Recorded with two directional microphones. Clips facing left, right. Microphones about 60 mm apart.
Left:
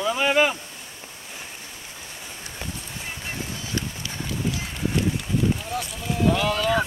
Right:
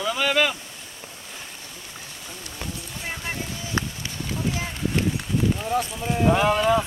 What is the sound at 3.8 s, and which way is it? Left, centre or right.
Run, right.